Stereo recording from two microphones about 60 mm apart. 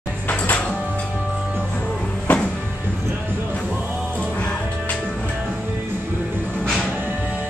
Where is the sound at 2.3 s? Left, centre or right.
Left.